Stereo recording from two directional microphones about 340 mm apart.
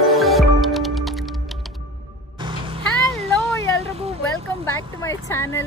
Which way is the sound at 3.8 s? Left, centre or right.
Centre.